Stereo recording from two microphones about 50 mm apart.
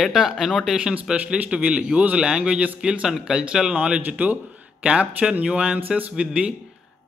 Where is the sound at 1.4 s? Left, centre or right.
Right.